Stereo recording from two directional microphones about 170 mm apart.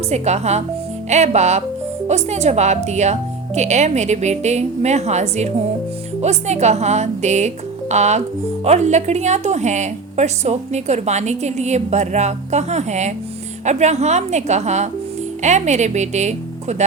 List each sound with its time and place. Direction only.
0.1 s a woman's voice: 40° right (ahead or behind)